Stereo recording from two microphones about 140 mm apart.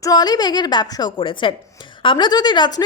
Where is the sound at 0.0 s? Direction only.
30° left (ahead or behind).